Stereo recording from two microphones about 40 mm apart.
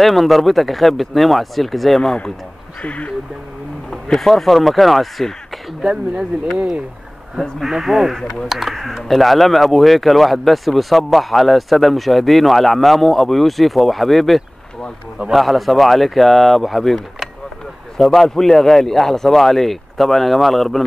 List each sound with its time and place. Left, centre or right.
0.0 s speech: centre
2.8 s speech: left
3.9 s speech: centre
5.8 s speech: centre
7.6 s speech: centre